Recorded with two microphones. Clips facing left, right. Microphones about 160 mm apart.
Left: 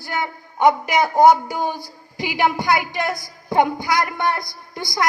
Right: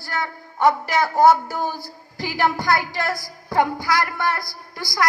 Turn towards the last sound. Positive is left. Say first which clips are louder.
# left 1 dB
turn(degrees=20)  # may be behind; listen again after turning